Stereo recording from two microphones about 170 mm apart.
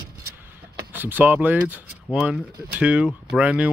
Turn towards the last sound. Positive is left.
turn(degrees=-5)  # may be behind; listen again after turning